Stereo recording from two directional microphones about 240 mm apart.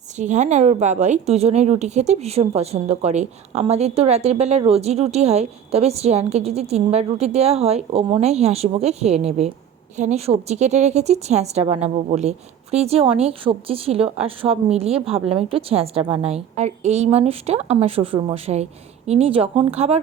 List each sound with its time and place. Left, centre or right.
0.2 s speech: right